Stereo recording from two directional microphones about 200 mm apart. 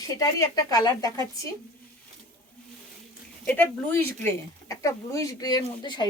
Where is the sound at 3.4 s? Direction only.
10° left (ahead or behind).